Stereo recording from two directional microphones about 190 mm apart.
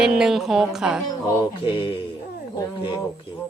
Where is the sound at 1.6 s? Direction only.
25° left (ahead or behind).